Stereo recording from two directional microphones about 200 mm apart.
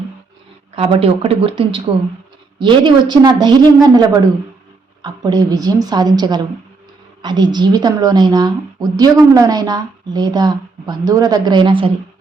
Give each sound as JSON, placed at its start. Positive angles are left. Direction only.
{"t": 0.8, "sound": "a woman's voice", "side_deg": -30}